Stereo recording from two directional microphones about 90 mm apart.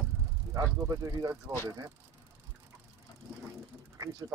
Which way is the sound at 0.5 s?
35° right (ahead or behind).